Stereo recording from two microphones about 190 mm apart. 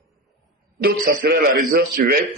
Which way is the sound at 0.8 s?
60° right (ahead or behind).